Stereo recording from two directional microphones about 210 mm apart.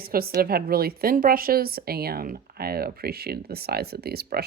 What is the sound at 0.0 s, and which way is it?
A woman's voice, 45° right (ahead or behind).